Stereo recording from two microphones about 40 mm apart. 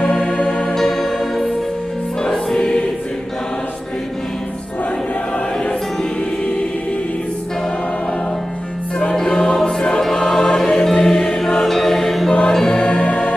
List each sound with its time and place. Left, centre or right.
0.0 s music: centre
0.7 s music: centre
9.1 s music: centre
12.3 s music: left